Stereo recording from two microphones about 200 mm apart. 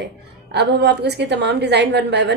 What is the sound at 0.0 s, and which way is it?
A woman's voice, 55° right (ahead or behind).